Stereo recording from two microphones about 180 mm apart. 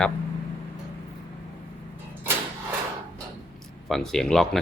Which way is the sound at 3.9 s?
Centre (ahead or behind).